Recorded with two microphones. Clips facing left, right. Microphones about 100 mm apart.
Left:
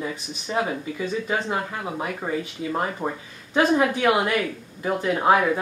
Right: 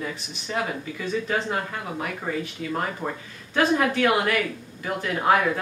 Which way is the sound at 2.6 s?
20° left (ahead or behind).